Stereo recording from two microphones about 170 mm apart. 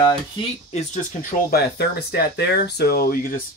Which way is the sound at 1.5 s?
70° left (ahead or behind).